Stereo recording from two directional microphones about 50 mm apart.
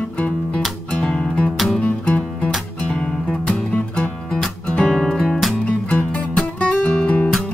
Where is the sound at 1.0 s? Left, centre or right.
Centre.